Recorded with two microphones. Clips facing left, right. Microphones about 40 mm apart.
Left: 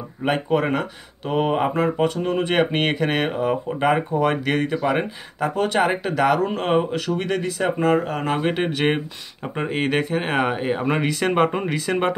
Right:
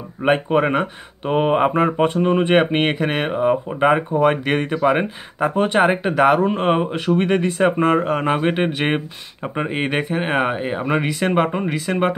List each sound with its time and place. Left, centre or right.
0.2 s speech: right
8.0 s speech: right; by 12.2 s centre